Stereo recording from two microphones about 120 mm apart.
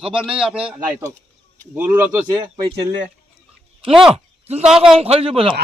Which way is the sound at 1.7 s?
15° right (ahead or behind).